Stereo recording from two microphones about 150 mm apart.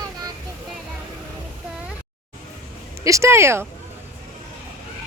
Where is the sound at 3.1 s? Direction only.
20° right (ahead or behind).